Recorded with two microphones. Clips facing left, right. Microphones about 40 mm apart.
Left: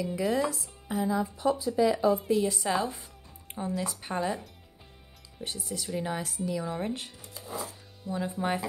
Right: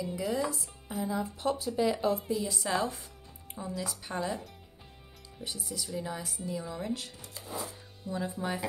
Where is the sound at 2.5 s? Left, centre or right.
Centre.